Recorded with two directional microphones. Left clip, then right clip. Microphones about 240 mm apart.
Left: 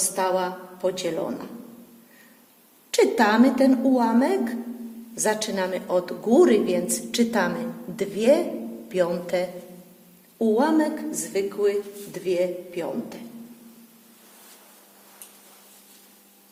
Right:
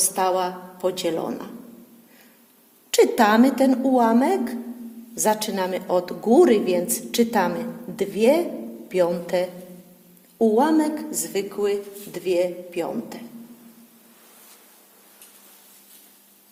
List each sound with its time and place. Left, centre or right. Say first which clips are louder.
0.0 s a woman's voice: right 2 dB; right
2.9 s a woman's voice: right 2 dB; right